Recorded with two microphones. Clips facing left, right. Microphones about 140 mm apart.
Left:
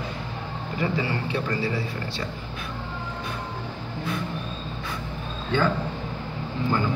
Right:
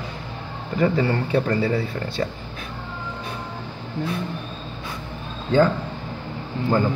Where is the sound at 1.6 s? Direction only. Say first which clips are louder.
Right 5 dB; 60° right (ahead or behind).